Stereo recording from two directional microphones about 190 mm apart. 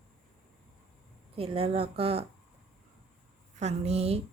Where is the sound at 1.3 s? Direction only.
30° right (ahead or behind).